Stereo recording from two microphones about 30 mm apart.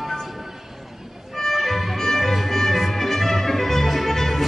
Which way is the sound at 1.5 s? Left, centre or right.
Centre.